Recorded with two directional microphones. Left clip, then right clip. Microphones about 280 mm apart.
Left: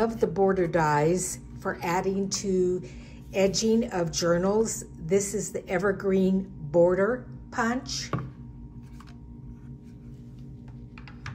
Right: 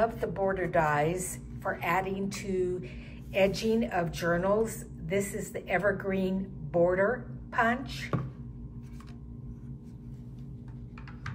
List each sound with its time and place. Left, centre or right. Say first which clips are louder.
0.0 s a woman's voice: left 4 dB; left